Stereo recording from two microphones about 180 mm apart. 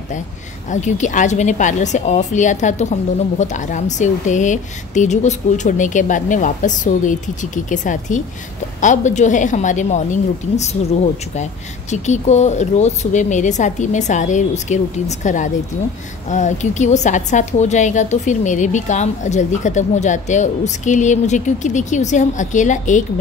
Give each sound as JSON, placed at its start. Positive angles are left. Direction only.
{"t": 0.7, "sound": "a woman's voice", "side_deg": 40}
{"t": 11.9, "sound": "a woman's voice", "side_deg": 40}